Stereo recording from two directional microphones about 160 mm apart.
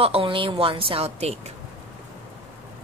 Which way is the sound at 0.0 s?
35° right (ahead or behind).